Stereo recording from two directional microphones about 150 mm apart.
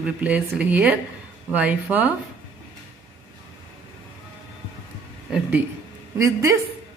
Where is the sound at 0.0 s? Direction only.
10° right (ahead or behind).